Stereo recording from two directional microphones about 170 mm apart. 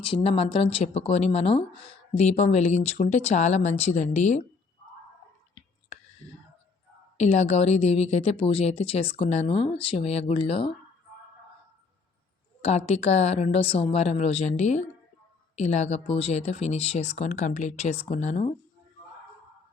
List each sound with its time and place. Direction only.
0.0 s speech: 35° left (ahead or behind)
7.2 s speech: 40° left (ahead or behind)
12.6 s speech: 40° left (ahead or behind)